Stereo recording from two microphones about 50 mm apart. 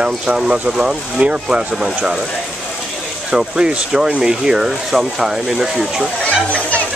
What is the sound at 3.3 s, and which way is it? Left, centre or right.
Speech, centre.